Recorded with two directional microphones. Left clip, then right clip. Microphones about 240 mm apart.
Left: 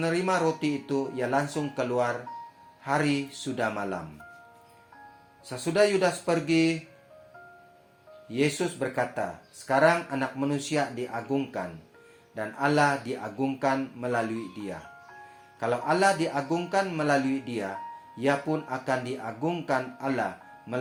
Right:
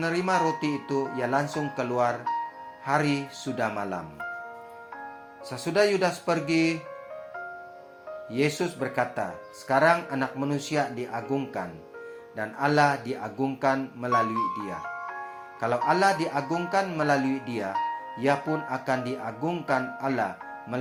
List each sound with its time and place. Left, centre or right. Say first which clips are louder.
0.0 s speech: right 1 dB; right
5.5 s speech: even; right
8.3 s speech: even; right
15.6 s speech: right 1 dB; right